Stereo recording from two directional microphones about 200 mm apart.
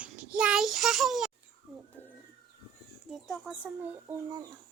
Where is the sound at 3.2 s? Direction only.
Centre (ahead or behind).